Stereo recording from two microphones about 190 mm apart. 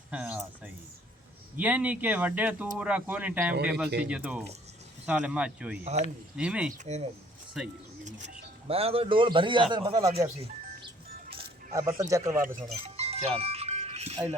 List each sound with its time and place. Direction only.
0.1 s speech: 5° right (ahead or behind)
5.8 s speech: 35° right (ahead or behind)
6.3 s speech: 5° right (ahead or behind)
6.7 s speech: 35° right (ahead or behind)
7.6 s speech: centre (ahead or behind)
8.0 s speech: 35° right (ahead or behind)
11.7 s speech: 15° right (ahead or behind)
12.8 s music: 30° right (ahead or behind)